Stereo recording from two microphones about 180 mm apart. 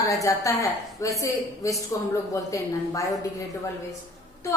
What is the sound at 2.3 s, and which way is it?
Speech, 20° left (ahead or behind).